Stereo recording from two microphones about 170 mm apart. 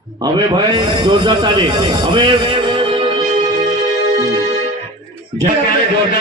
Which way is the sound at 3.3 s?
45° right (ahead or behind).